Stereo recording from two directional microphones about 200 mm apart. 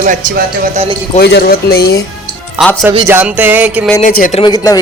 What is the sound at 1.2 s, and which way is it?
Speech, 55° left (ahead or behind).